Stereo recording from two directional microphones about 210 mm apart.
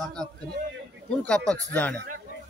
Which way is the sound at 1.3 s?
5° left (ahead or behind).